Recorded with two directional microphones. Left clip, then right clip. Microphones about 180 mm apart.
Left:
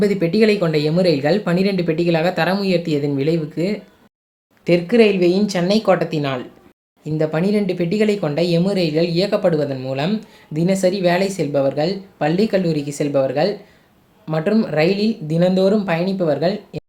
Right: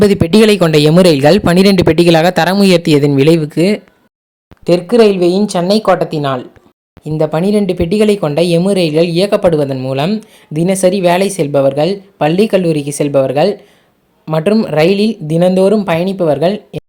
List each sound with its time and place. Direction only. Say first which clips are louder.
0.0 s speech: right 7 dB; 60° right (ahead or behind)
4.6 s speech: right 6 dB; 30° right (ahead or behind)